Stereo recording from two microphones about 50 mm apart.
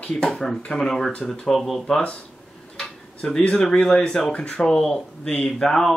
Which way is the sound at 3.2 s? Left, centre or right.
Centre.